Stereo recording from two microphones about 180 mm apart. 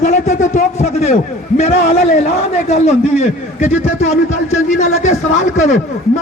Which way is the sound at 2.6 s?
40° left (ahead or behind).